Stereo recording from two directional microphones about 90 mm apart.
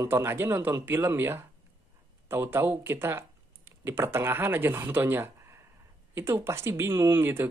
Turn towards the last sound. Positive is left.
turn(degrees=-25)  # may be behind; listen again after turning